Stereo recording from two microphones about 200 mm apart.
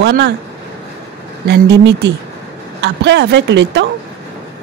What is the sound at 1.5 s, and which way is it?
Speech, 60° right (ahead or behind).